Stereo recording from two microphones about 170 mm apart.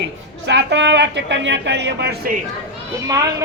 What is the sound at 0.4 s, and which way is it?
Speech, 90° right.